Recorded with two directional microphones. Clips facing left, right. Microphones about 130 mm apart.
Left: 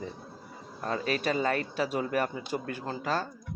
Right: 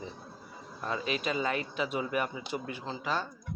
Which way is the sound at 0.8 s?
45° left (ahead or behind).